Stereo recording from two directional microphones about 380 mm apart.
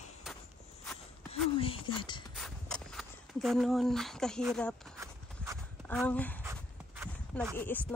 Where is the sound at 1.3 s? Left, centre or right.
Centre.